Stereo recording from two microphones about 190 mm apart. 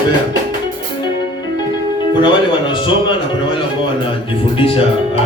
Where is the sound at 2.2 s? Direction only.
25° left (ahead or behind).